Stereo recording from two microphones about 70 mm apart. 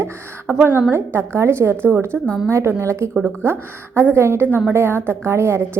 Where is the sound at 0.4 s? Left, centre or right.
Right.